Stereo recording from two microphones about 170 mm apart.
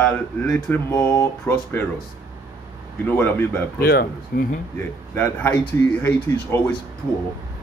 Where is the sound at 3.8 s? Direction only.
60° left (ahead or behind).